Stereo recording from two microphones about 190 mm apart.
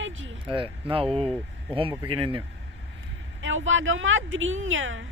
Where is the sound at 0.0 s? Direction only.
90° right.